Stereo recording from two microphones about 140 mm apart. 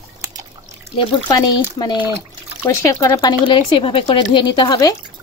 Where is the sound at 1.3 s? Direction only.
30° left (ahead or behind).